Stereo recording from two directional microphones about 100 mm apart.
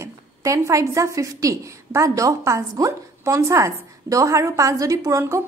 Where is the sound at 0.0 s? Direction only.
30° right (ahead or behind).